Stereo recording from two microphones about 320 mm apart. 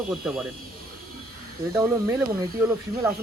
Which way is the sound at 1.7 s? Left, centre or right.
Centre.